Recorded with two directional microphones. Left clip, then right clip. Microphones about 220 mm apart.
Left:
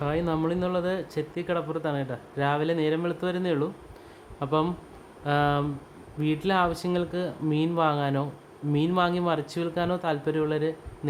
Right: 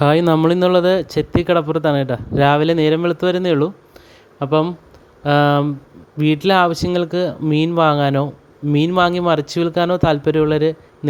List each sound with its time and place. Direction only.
0.0 s speech: 45° right (ahead or behind)